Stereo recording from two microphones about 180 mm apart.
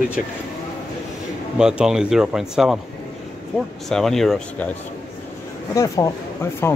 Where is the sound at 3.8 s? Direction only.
Centre (ahead or behind).